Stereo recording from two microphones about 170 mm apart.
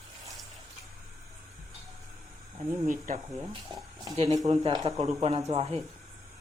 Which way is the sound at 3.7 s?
25° right (ahead or behind).